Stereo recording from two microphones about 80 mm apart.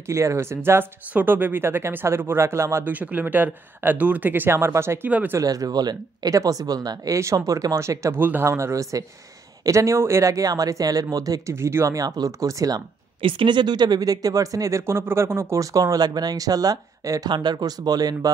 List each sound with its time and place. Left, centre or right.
0.0 s speech: right
2.8 s speech: centre
5.4 s speech: right
8.2 s speech: right
8.5 s speech: right
11.5 s speech: right
13.2 s speech: right
17.3 s speech: right